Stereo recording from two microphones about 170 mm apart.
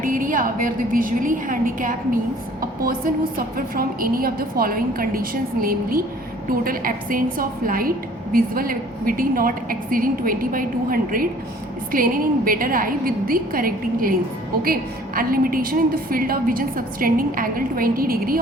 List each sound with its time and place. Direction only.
0.0 s a woman's voice: 50° right (ahead or behind)